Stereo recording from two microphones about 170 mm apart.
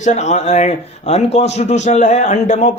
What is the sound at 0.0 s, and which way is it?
Speech, 45° left (ahead or behind).